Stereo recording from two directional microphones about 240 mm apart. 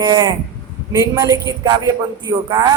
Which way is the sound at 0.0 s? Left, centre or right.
Centre.